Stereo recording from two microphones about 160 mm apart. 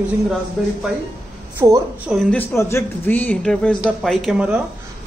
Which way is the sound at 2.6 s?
15° left (ahead or behind).